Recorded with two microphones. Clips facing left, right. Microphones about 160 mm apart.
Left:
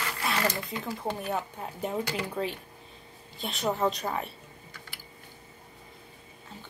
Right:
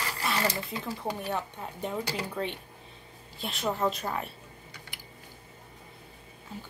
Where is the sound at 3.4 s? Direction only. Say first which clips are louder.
Left 1 dB; centre (ahead or behind).